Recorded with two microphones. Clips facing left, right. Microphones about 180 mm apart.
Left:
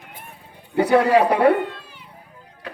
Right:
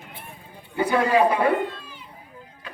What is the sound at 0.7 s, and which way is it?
Speech, 70° left (ahead or behind).